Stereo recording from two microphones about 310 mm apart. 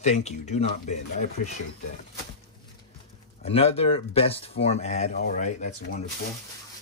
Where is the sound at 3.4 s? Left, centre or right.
Centre.